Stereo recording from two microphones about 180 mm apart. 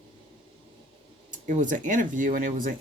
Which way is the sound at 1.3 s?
45° right (ahead or behind).